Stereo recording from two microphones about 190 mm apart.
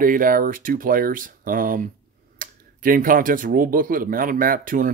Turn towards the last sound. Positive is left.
turn(degrees=-45)  # may be behind; listen again after turning